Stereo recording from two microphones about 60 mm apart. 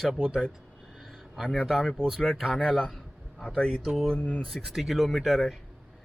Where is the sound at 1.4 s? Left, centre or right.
Centre.